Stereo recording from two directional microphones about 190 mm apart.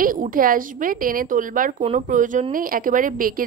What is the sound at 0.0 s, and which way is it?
A woman's voice, 45° right (ahead or behind).